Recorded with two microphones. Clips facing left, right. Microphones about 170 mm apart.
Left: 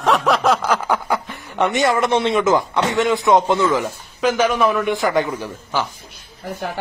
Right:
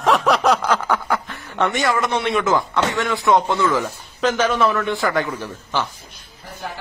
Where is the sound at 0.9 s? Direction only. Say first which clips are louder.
Left 1 dB; 15° left (ahead or behind).